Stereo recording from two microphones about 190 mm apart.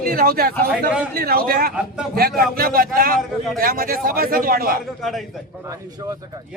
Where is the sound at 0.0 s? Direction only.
50° right (ahead or behind).